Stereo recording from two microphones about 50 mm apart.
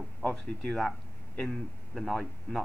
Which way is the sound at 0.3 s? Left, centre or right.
Left.